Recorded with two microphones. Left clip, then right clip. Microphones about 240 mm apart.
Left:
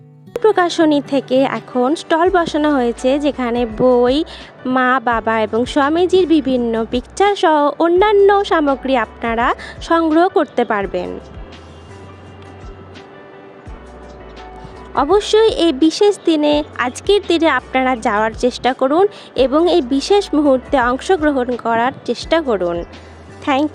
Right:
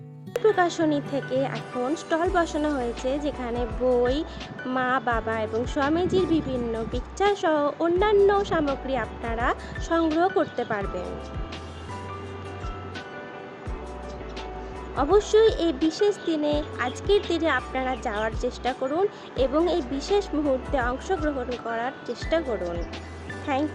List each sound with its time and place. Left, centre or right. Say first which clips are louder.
0.4 s speech: left 9 dB; left
14.9 s speech: left 7 dB; left